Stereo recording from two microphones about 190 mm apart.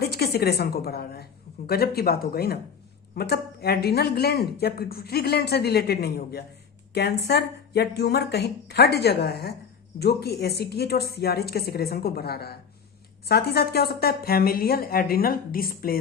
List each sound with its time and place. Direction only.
0.0 s a woman's voice: 55° left (ahead or behind)